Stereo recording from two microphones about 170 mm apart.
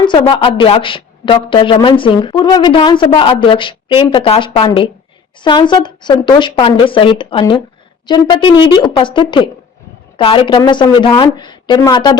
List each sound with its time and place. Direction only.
0.0 s a woman's voice: 25° left (ahead or behind)